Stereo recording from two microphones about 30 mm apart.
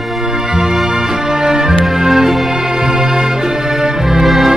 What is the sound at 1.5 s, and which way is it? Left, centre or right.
Music, right.